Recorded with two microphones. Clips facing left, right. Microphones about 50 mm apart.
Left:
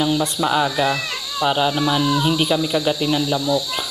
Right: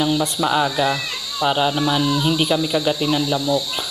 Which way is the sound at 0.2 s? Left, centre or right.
Centre.